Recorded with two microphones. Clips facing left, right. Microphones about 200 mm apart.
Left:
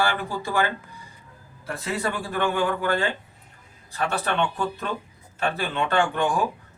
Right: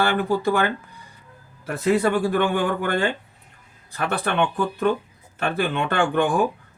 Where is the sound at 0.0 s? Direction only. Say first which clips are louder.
Right 6 dB; 60° right (ahead or behind).